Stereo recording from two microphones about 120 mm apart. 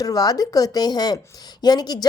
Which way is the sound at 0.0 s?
30° left (ahead or behind).